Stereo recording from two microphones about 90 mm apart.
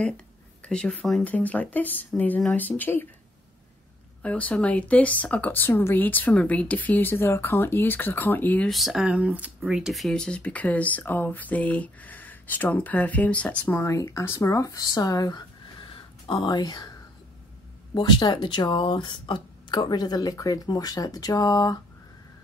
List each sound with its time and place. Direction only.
0.7 s speech: 10° left (ahead or behind)
1.2 s speech: 15° left (ahead or behind)
4.2 s speech: 15° left (ahead or behind)
8.6 s speech: centre (ahead or behind)
9.0 s speech: 15° right (ahead or behind); by 13.7 s 15° left (ahead or behind)
13.7 s speech: 35° left (ahead or behind)
15.8 s a sound: 65° left (ahead or behind)
16.5 s speech: 50° left (ahead or behind)
17.9 s speech: 60° left (ahead or behind)